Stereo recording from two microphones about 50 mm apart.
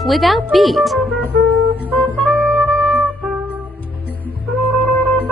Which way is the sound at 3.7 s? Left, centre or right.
Left.